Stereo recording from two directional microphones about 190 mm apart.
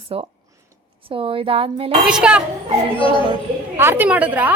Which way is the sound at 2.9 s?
25° left (ahead or behind).